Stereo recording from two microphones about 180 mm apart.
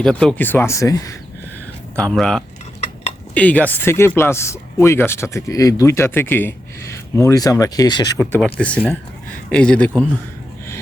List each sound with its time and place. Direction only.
0.0 s speech: 5° left (ahead or behind)
2.0 s speech: 5° left (ahead or behind); by 8.2 s 25° left (ahead or behind)
8.2 s speech: 10° left (ahead or behind)